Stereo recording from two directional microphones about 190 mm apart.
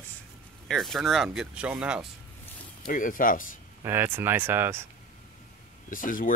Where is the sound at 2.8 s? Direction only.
45° left (ahead or behind).